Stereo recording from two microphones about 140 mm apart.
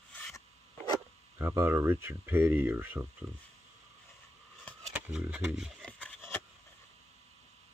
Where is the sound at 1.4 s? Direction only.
20° right (ahead or behind).